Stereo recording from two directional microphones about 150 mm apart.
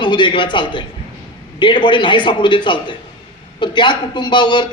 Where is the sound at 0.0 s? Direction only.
30° left (ahead or behind).